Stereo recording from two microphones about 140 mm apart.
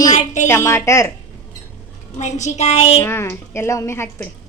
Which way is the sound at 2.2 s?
55° left (ahead or behind).